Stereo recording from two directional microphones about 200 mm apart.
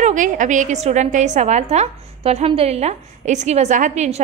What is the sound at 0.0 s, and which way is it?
A woman's voice, 40° right (ahead or behind).